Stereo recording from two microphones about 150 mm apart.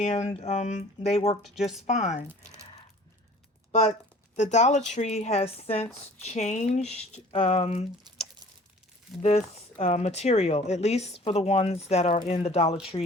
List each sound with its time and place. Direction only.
0.0 s speech: 45° left (ahead or behind)
1.4 s speech: centre (ahead or behind)
1.9 s speech: 50° left (ahead or behind)
3.7 s speech: 50° left (ahead or behind)
7.3 s speech: 40° left (ahead or behind)
9.2 s speech: 45° left (ahead or behind)
12.9 s speech: 35° left (ahead or behind)